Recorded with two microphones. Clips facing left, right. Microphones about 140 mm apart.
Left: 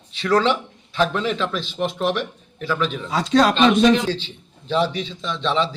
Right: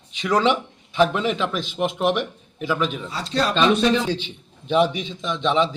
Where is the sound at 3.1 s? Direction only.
90° left.